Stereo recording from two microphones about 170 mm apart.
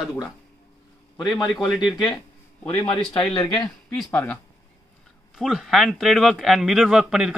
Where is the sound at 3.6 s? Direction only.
Centre (ahead or behind).